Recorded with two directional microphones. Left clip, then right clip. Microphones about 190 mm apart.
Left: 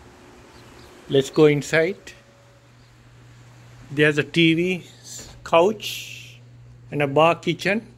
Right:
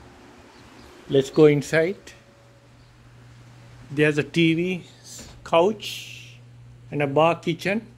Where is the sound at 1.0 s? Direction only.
10° right (ahead or behind).